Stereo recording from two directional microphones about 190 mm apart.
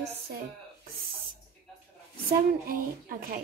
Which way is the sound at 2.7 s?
50° right (ahead or behind).